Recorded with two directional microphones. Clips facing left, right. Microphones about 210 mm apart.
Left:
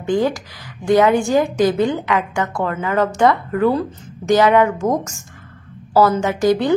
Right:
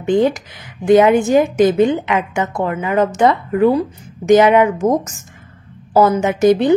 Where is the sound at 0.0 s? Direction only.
20° right (ahead or behind).